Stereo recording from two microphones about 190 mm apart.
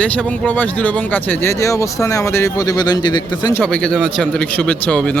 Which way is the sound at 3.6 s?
5° left (ahead or behind).